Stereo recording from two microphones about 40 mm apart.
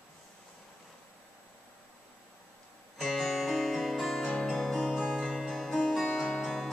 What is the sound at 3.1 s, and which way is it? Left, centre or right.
Music, centre.